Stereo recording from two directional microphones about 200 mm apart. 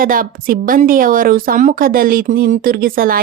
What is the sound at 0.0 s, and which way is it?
A woman's voice, 45° right (ahead or behind).